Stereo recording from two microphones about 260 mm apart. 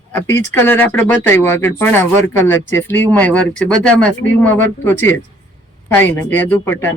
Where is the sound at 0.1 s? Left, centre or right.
Centre.